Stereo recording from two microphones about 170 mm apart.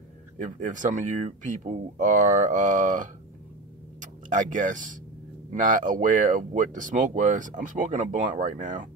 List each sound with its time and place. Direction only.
0.4 s speech: 50° right (ahead or behind)